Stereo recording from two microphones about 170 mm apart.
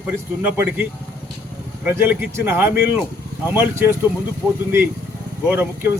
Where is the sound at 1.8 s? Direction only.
10° right (ahead or behind).